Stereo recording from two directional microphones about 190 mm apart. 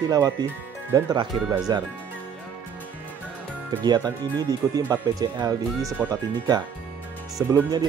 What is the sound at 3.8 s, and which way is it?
Speech, 20° right (ahead or behind).